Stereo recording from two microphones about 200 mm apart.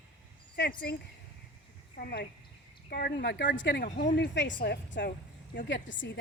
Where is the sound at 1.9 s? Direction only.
55° left (ahead or behind).